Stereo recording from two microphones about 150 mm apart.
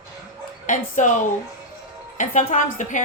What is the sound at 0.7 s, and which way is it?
Speech, 55° left (ahead or behind).